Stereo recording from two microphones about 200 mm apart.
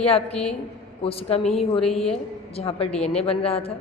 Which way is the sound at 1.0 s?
30° left (ahead or behind).